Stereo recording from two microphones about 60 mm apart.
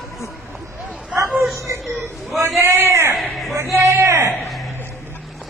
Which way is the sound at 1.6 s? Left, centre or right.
Right.